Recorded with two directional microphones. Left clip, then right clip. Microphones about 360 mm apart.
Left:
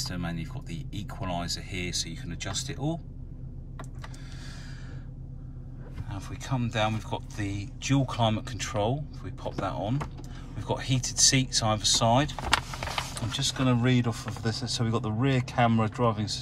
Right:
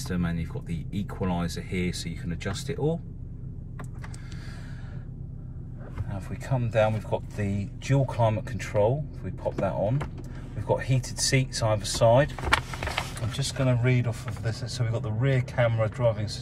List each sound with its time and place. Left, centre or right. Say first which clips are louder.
0.7 s speech: right 3 dB; centre
6.1 s speech: right 1 dB; centre